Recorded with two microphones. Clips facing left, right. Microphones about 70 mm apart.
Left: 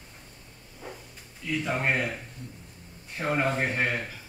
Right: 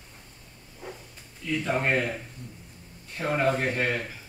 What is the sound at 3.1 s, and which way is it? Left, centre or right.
Speech, centre.